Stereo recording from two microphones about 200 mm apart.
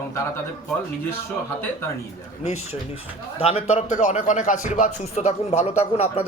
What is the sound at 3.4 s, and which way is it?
Speech, 30° left (ahead or behind).